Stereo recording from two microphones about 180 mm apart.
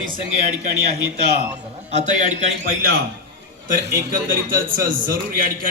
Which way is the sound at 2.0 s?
40° right (ahead or behind).